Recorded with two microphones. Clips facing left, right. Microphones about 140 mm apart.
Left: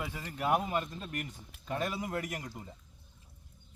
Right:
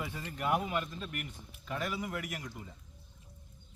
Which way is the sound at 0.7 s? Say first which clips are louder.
Left 1 dB; 35° left (ahead or behind).